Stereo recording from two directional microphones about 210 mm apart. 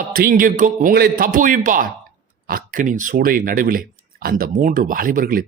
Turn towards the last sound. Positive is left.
turn(degrees=-45)  # may be behind; listen again after turning